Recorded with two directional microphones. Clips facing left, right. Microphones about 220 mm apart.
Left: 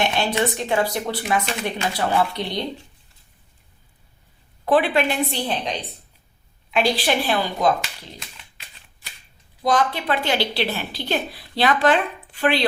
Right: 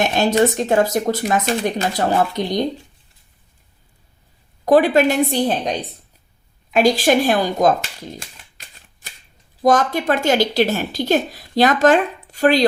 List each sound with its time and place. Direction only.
0.0 s speech: 45° right (ahead or behind)
4.6 s speech: 40° right (ahead or behind)
6.7 s a sound: 45° right (ahead or behind)
9.6 s speech: 45° right (ahead or behind)